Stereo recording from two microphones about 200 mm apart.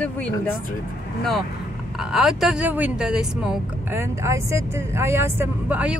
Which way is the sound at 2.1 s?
Centre (ahead or behind).